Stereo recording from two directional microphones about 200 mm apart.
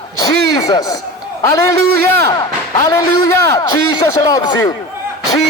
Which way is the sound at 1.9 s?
50° right (ahead or behind).